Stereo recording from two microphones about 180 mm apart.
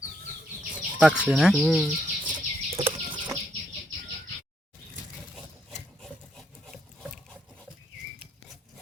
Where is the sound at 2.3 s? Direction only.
30° right (ahead or behind).